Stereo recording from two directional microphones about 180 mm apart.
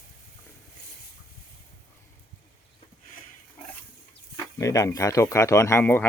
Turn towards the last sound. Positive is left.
turn(degrees=10)  # may be behind; listen again after turning